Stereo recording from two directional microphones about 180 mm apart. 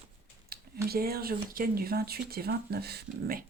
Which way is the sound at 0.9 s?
60° right (ahead or behind).